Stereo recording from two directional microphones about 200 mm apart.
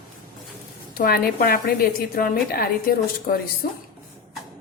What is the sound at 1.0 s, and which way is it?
A woman's voice, 50° left (ahead or behind).